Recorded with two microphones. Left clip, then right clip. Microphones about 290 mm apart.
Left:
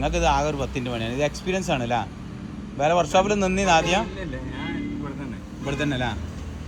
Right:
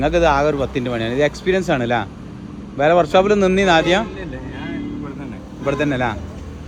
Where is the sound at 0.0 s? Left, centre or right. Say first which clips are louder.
Right 7 dB; right.